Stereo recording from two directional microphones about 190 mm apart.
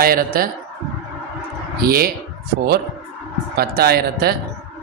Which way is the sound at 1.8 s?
50° right (ahead or behind).